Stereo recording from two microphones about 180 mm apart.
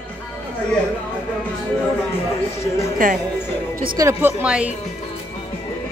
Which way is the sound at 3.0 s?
50° right (ahead or behind).